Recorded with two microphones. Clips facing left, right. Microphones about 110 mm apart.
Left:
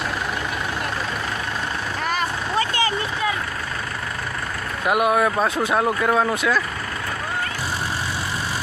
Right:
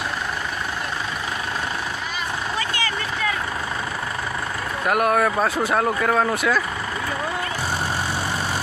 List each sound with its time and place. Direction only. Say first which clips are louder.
2.5 s vehicle: left 7 dB; 35° left (ahead or behind)
4.8 s speech: left 1 dB; 5° left (ahead or behind)
6.3 s speech: even; 5° right (ahead or behind)